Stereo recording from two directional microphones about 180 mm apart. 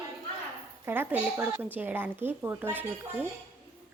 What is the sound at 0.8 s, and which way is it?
Speech, 10° right (ahead or behind).